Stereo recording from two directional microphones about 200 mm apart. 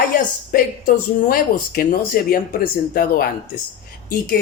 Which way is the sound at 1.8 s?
45° left (ahead or behind).